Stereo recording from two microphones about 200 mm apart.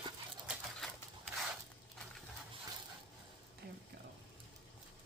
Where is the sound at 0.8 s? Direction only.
Centre (ahead or behind).